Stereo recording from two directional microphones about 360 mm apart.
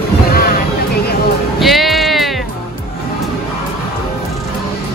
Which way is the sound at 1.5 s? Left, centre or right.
Centre.